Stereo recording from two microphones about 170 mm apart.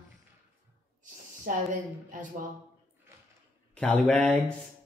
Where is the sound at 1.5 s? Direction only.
50° right (ahead or behind).